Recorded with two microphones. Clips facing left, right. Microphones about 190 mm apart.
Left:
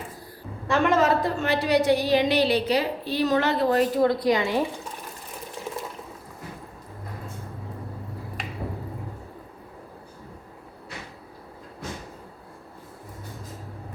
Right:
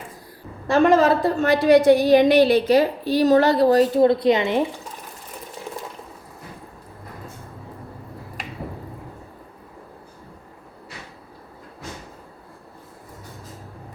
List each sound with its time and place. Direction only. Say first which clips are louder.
0.7 s a woman's voice: right 5 dB; 35° right (ahead or behind)